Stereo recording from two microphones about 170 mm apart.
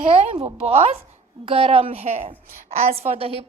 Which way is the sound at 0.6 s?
40° right (ahead or behind).